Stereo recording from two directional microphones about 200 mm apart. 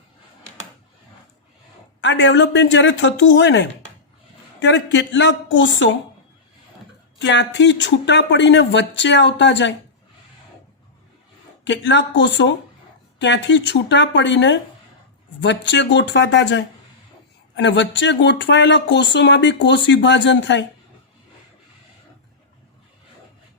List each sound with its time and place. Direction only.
2.0 s speech: 65° left (ahead or behind)
7.2 s speech: 65° left (ahead or behind)
11.6 s speech: 65° left (ahead or behind)